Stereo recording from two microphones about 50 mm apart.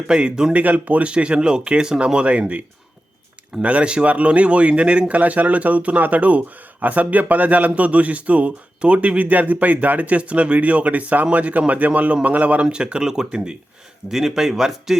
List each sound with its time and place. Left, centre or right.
0.1 s speech: centre
0.5 s speech: right; by 14.9 s centre